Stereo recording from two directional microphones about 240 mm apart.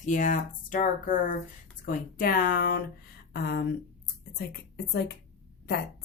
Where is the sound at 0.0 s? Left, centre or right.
Left.